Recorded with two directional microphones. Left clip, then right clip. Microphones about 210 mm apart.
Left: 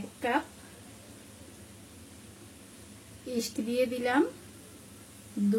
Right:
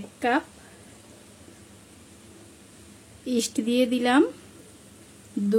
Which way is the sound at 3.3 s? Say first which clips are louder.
Right 5 dB; 55° right (ahead or behind).